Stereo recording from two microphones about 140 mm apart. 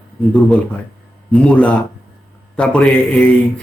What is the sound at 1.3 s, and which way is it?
Speech, 10° left (ahead or behind).